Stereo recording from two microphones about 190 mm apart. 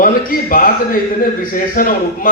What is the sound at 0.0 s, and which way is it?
A man's voice, 50° left (ahead or behind).